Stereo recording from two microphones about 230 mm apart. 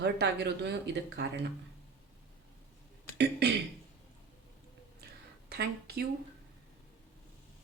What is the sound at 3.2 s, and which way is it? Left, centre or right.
Speech, right.